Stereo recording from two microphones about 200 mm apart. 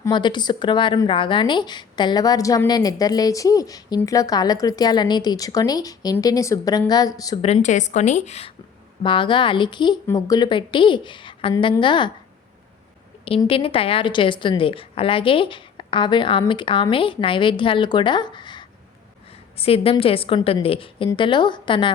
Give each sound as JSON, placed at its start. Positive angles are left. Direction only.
{"t": 0.0, "sound": "speech", "side_deg": 25}
{"t": 7.4, "sound": "a woman's voice", "side_deg": 35}
{"t": 13.2, "sound": "speech", "side_deg": 30}